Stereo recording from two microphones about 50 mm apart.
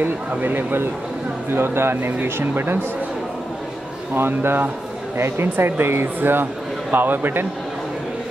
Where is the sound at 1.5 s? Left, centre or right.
Right.